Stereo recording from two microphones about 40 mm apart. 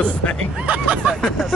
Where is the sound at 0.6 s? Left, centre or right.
Right.